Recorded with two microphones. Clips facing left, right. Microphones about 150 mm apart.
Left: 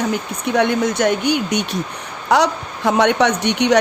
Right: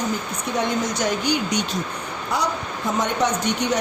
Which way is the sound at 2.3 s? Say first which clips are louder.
Left 9 dB; 75° left (ahead or behind).